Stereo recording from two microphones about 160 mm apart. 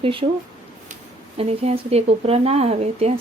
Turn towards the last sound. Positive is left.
turn(degrees=-40)  # may be behind; listen again after turning